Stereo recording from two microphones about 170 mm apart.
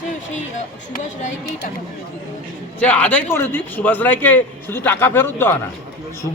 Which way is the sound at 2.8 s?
10° left (ahead or behind).